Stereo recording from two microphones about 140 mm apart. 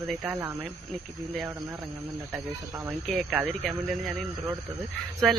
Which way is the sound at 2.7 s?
15° right (ahead or behind).